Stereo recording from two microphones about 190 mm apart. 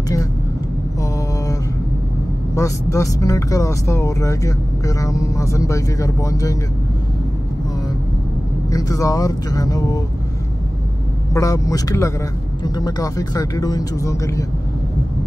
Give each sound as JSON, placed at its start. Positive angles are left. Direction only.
{"t": 2.5, "sound": "speech", "side_deg": 15}
{"t": 8.6, "sound": "speech", "side_deg": 15}
{"t": 11.3, "sound": "speech", "side_deg": 15}